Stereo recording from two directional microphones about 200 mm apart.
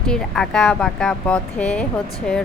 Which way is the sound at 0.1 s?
Centre (ahead or behind).